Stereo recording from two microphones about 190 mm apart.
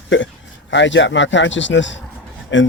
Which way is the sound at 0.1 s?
70° left (ahead or behind).